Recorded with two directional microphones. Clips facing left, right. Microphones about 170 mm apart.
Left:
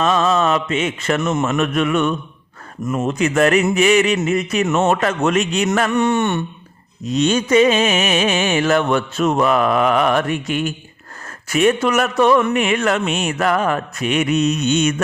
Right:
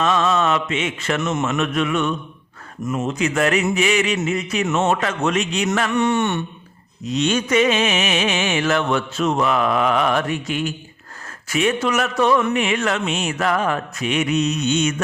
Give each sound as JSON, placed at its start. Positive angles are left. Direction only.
{"t": 0.0, "sound": "mantra", "side_deg": 35}
{"t": 1.7, "sound": "mantra", "side_deg": 50}